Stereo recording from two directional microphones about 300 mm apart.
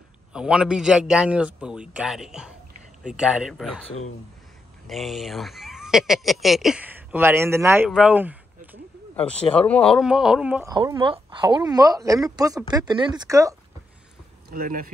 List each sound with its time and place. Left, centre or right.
0.3 s speech: centre
14.5 s speech: right